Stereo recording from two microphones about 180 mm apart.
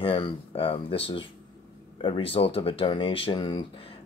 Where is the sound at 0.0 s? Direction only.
30° left (ahead or behind).